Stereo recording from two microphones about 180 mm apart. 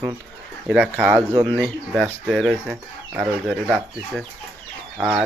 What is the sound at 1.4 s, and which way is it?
Speech, centre (ahead or behind).